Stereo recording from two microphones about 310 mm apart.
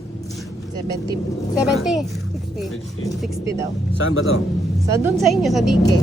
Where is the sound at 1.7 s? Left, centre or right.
Centre.